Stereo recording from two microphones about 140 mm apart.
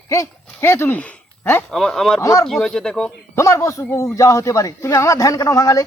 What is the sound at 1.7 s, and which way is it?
Speech, 5° left (ahead or behind).